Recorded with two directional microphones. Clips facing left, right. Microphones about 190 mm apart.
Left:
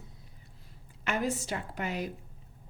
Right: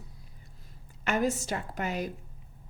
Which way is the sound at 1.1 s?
45° right (ahead or behind).